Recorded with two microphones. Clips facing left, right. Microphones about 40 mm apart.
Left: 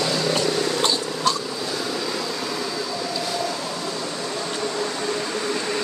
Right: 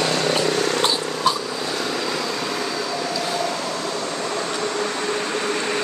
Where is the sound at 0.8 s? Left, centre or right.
Centre.